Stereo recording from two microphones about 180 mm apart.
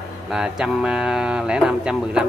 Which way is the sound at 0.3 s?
5° right (ahead or behind).